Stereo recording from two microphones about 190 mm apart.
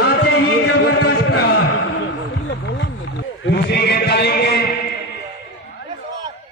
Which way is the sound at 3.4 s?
60° left (ahead or behind).